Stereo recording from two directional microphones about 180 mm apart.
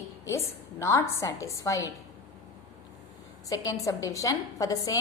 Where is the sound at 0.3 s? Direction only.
15° left (ahead or behind).